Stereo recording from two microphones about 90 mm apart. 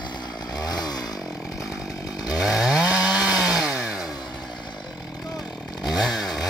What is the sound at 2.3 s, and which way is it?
Chainsaw, 5° right (ahead or behind).